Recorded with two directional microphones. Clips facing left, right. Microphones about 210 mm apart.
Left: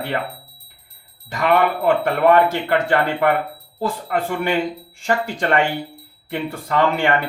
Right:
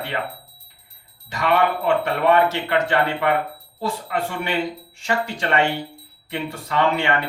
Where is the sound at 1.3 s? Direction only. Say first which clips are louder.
Left 2 dB; 50° left (ahead or behind).